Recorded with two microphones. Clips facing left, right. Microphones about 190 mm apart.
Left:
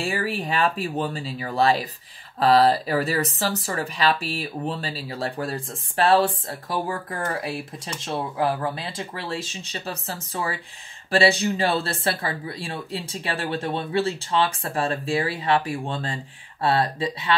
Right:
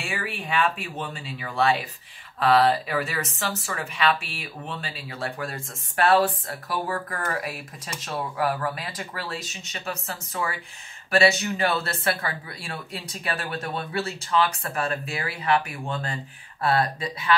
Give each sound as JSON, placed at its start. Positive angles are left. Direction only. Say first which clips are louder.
{"t": 0.0, "sound": "speech", "louder": "left 6 dB", "side_deg": 35}